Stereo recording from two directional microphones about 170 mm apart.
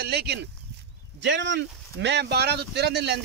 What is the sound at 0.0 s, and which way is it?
Speech, 70° right (ahead or behind).